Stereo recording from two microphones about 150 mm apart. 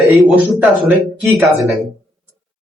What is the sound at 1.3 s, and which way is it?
Speech, 20° right (ahead or behind).